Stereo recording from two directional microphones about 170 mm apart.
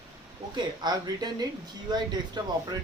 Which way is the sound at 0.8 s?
25° right (ahead or behind).